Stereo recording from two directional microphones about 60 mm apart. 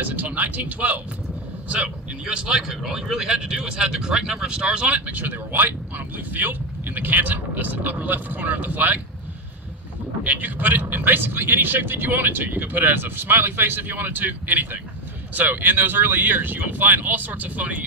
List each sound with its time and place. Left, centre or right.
0.0 s speech: right
10.2 s speech: right